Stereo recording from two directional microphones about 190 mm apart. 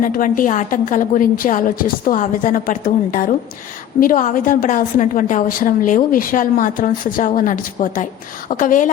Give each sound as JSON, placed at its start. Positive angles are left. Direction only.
{"t": 0.0, "sound": "a woman's voice", "side_deg": 45}